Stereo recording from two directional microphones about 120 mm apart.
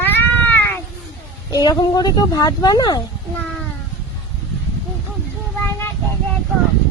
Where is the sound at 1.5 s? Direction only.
30° left (ahead or behind).